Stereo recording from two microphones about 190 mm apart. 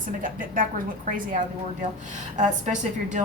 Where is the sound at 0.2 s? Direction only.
45° right (ahead or behind).